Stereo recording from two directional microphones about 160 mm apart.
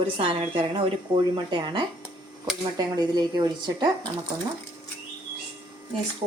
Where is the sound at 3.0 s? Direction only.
25° right (ahead or behind).